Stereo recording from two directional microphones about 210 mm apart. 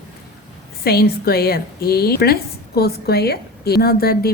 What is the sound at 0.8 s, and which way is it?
A woman's voice, 45° left (ahead or behind).